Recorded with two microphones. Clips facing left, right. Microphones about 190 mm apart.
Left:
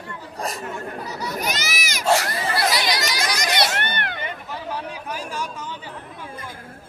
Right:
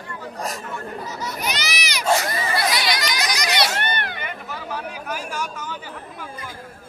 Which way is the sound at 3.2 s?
50° left (ahead or behind).